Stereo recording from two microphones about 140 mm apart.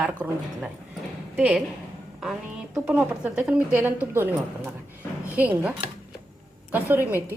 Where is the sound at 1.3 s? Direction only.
10° right (ahead or behind).